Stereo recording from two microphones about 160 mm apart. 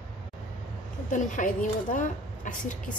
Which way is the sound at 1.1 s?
55° left (ahead or behind).